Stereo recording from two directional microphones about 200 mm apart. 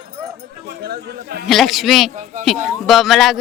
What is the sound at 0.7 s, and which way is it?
Speech, 55° right (ahead or behind).